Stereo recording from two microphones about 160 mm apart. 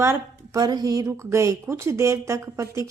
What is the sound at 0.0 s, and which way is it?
A woman's voice, 20° right (ahead or behind).